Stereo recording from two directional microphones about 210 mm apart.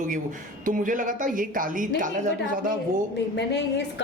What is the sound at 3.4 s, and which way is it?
Speech, 55° left (ahead or behind).